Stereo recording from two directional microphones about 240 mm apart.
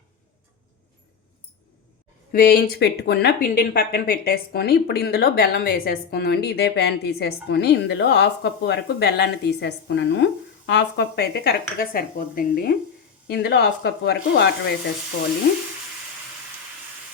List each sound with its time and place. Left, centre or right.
2.3 s speech: left